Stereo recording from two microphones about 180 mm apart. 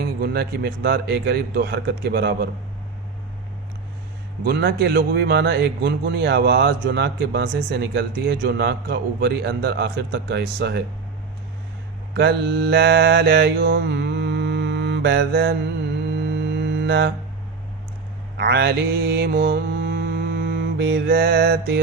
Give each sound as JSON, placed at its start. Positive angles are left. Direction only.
{"t": 0.0, "sound": "a man's voice", "side_deg": -65}
{"t": 4.4, "sound": "a man's voice", "side_deg": -65}
{"t": 12.1, "sound": "mantra", "side_deg": -65}
{"t": 16.0, "sound": "mantra", "side_deg": -70}
{"t": 18.3, "sound": "mantra", "side_deg": -65}